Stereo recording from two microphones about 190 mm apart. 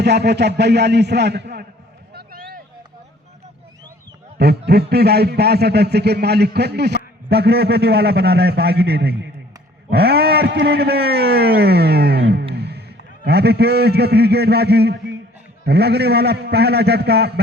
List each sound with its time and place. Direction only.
0.0 s a man's voice: 60° right (ahead or behind)
2.1 s a sound: 50° right (ahead or behind)
4.4 s a man's voice: 60° right (ahead or behind)
12.5 s music: 60° right (ahead or behind)
13.2 s a man's voice: 60° right (ahead or behind)